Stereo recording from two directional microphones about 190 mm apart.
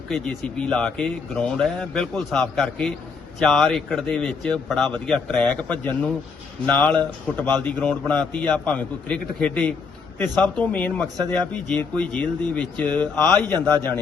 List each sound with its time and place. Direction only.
0.1 s a man's voice: 5° left (ahead or behind)
13.7 s a man's voice: 20° right (ahead or behind)